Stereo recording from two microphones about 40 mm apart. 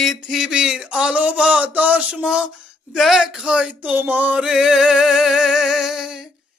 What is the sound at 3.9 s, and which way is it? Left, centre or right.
Music, right.